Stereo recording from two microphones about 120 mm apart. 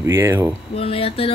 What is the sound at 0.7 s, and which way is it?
Speech, 55° left (ahead or behind).